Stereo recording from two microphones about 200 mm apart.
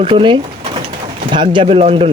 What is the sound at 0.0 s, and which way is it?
Speech, 25° right (ahead or behind).